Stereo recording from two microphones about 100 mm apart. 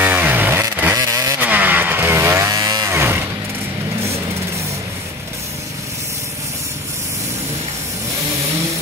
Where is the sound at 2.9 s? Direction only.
25° right (ahead or behind).